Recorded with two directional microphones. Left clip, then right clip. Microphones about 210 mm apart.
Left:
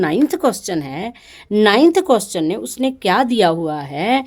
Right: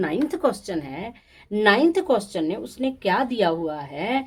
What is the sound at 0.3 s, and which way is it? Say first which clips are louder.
Speech: left 5 dB; 50° left (ahead or behind).